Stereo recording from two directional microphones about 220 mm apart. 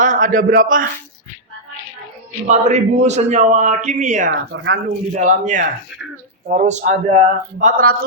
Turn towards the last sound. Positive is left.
turn(degrees=-35)  # may be behind; listen again after turning